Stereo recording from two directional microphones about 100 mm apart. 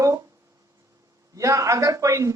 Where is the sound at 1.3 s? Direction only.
35° right (ahead or behind).